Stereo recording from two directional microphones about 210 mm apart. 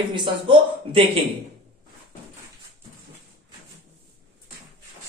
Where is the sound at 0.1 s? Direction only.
25° right (ahead or behind).